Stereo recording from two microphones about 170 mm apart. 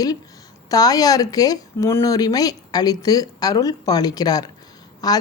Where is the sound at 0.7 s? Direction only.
20° left (ahead or behind).